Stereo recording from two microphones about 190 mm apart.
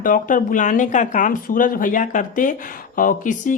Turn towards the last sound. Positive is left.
turn(degrees=45)  # may be behind; listen again after turning